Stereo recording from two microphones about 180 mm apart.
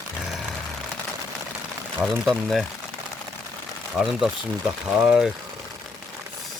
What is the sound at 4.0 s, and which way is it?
Speech, 5° right (ahead or behind).